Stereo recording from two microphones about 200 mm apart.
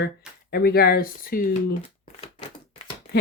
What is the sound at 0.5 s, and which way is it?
Speech, 50° left (ahead or behind).